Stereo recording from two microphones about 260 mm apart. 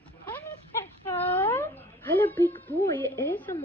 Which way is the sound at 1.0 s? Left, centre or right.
Centre.